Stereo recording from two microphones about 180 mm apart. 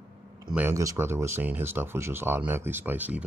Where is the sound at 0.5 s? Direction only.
10° right (ahead or behind).